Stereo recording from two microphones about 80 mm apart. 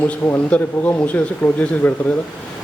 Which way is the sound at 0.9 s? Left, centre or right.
Left.